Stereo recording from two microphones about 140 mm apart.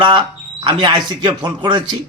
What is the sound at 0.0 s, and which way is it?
Speech, 35° right (ahead or behind).